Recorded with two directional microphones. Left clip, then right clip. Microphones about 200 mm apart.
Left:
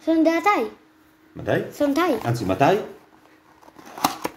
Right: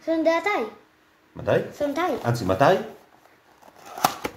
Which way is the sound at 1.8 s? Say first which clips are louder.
Left 4 dB; 55° left (ahead or behind).